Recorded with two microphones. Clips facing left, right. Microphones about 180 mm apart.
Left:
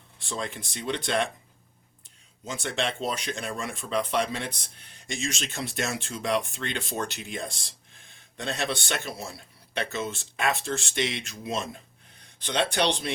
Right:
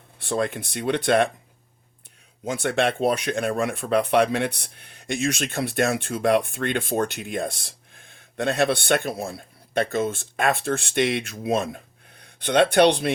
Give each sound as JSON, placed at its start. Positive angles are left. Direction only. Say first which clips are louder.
{"t": 0.2, "sound": "speech", "louder": "right 9 dB", "side_deg": -60}
{"t": 2.4, "sound": "speech", "louder": "right 8 dB", "side_deg": -55}